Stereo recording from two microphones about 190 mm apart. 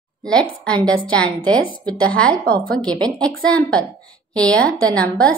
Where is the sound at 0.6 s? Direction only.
5° left (ahead or behind).